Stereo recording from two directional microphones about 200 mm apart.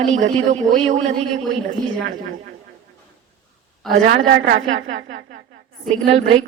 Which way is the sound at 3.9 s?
40° right (ahead or behind).